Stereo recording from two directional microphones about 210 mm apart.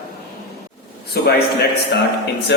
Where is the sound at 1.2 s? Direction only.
50° left (ahead or behind).